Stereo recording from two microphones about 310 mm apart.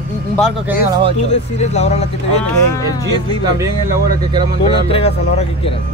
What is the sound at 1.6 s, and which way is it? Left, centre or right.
Speech, left.